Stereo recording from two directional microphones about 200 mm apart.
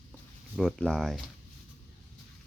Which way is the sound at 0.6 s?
Centre (ahead or behind).